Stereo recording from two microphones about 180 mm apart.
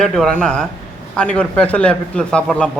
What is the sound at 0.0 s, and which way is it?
A man's voice, 5° left (ahead or behind).